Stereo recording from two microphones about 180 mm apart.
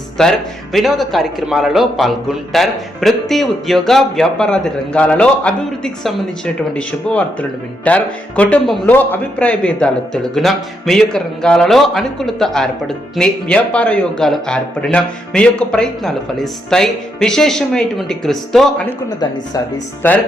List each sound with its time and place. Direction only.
0.2 s a man's voice: centre (ahead or behind)